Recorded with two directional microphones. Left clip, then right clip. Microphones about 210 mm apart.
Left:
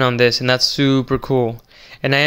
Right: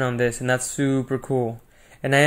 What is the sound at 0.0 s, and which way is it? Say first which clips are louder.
Speech: left 8 dB; 35° left (ahead or behind).